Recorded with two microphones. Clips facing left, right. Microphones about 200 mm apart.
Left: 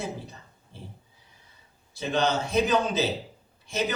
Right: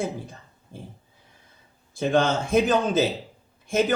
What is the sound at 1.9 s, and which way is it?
A man's voice, 50° right (ahead or behind).